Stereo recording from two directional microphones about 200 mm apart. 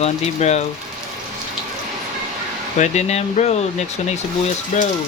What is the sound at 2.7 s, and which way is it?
Speech, 35° left (ahead or behind).